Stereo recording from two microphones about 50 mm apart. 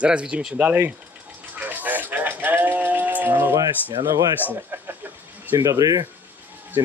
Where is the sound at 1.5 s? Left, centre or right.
Right.